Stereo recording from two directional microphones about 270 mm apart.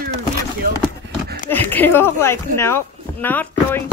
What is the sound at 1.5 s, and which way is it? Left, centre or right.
Speech, centre.